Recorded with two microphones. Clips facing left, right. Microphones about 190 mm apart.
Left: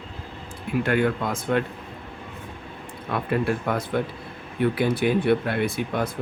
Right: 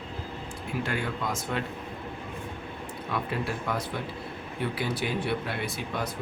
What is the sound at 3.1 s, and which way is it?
Speech, 55° left (ahead or behind).